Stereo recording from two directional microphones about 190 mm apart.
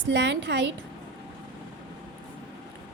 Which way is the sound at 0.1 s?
65° right (ahead or behind).